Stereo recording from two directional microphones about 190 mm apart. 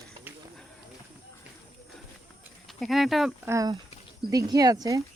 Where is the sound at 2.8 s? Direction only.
Centre (ahead or behind).